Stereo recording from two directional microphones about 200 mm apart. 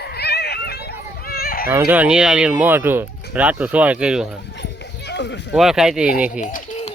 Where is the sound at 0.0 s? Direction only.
55° left (ahead or behind).